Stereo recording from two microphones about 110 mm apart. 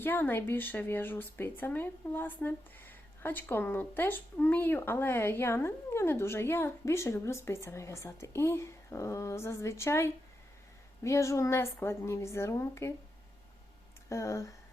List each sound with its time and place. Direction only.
0.0 s speech: 20° left (ahead or behind)
14.1 s speech: 25° left (ahead or behind)